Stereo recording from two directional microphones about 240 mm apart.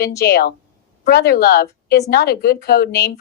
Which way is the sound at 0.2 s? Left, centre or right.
Left.